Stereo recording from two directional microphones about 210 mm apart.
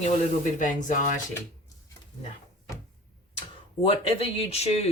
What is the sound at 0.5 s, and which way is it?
Speech, 35° left (ahead or behind).